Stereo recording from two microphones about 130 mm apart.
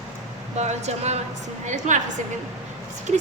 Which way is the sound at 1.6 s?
70° right (ahead or behind).